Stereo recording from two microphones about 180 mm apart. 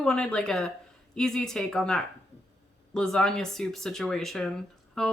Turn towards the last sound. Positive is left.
turn(degrees=5)  # may be behind; listen again after turning